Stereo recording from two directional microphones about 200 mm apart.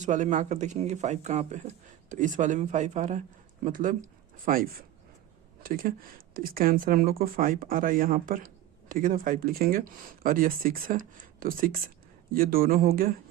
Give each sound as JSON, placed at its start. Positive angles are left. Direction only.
{"t": 0.0, "sound": "speech", "side_deg": -40}